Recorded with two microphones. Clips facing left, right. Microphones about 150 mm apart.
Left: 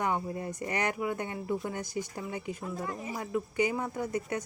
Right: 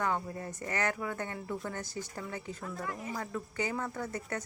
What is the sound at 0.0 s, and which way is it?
Speech, 15° left (ahead or behind).